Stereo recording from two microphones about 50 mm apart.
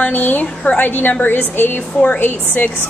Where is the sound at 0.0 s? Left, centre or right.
Left.